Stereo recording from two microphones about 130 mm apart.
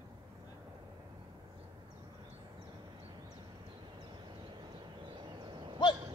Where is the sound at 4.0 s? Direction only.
35° right (ahead or behind).